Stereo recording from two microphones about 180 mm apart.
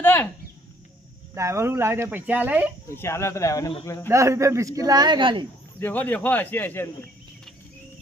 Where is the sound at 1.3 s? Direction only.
15° right (ahead or behind).